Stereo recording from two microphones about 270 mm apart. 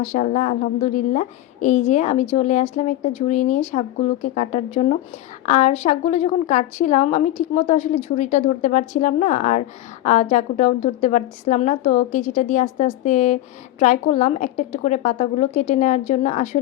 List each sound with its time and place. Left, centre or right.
0.0 s a woman's voice: left